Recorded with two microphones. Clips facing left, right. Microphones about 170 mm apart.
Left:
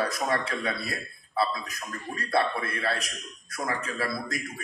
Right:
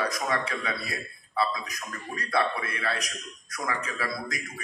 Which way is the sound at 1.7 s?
30° left (ahead or behind).